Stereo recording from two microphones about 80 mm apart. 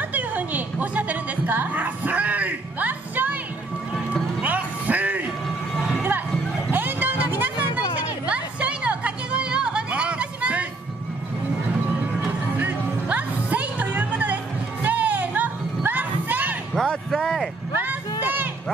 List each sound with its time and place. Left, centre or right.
0.1 s music: centre
4.4 s music: centre
6.7 s vehicle: right
8.3 s music: centre
12.5 s music: centre
16.7 s a sound: centre
18.2 s a sound: right